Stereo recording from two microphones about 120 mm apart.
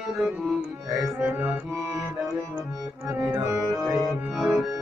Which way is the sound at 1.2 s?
15° right (ahead or behind).